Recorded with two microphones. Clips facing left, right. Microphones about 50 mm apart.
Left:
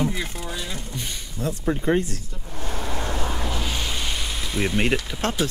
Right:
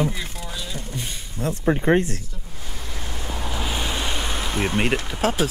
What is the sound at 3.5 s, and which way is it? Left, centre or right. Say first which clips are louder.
Waves: right 1 dB; centre.